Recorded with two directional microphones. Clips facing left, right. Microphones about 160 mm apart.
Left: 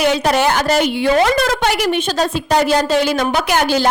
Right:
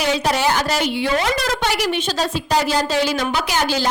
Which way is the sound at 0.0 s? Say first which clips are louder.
Left 4 dB; 60° left (ahead or behind).